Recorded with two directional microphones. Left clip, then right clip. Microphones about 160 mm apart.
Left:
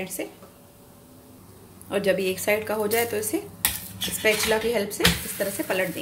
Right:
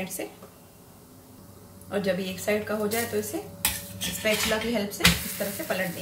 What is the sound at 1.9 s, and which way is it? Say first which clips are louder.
Speech: left 5 dB; 45° left (ahead or behind).